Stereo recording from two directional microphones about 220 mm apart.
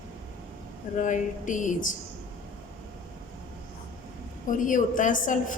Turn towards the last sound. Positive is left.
turn(degrees=35)  # may be behind; listen again after turning